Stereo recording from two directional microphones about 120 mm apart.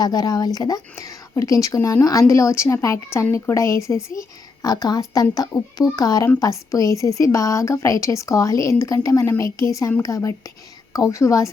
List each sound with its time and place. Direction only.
0.0 s a woman's voice: 35° left (ahead or behind)